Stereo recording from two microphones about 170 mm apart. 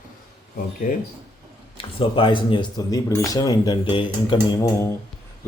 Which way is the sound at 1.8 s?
30° left (ahead or behind).